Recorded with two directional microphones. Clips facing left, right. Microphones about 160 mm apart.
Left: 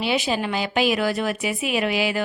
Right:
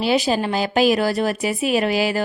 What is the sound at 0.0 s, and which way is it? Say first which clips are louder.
A woman's voice: right 4 dB; 40° right (ahead or behind).